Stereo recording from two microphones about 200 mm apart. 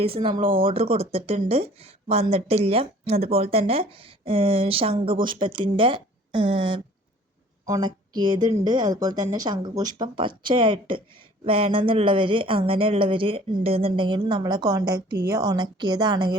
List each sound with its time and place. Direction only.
0.0 s speech: 25° right (ahead or behind)